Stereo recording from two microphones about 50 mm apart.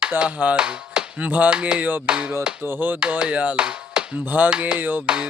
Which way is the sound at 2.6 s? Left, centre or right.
Right.